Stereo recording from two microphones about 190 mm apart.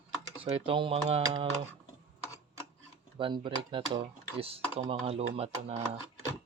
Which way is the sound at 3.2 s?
25° right (ahead or behind).